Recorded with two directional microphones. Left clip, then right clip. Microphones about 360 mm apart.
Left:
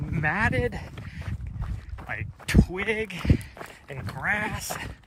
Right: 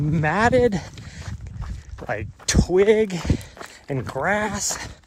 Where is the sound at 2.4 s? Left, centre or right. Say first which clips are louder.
Right 10 dB; centre.